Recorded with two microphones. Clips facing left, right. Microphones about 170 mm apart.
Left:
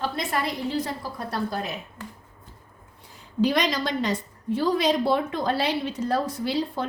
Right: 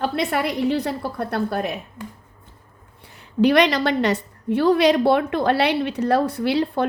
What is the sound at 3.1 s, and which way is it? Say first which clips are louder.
A woman's voice: right 7 dB; 65° right (ahead or behind).